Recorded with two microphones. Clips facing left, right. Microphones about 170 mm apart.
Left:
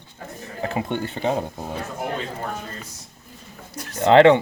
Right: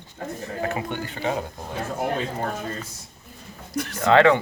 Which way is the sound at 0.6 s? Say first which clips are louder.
Left 4 dB; 25° left (ahead or behind).